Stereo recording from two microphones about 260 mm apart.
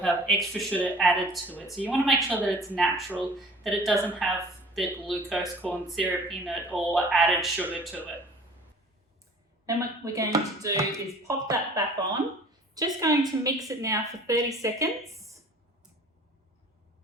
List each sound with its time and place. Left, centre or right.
0.0 s speech: centre
2.8 s speech: centre
9.6 s a woman's voice: centre